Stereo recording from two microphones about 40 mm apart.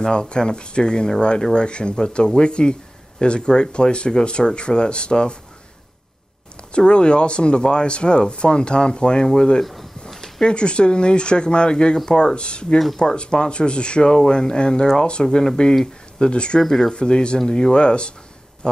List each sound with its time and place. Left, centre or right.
0.0 s speech: left
6.7 s speech: left
9.6 s speech: centre
10.0 s a sound: centre
10.5 s speech: left
12.7 s speech: centre
13.0 s speech: left
16.6 s speech: centre
16.9 s speech: left